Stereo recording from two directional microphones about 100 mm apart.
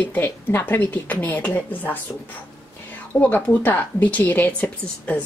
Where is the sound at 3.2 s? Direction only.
15° left (ahead or behind).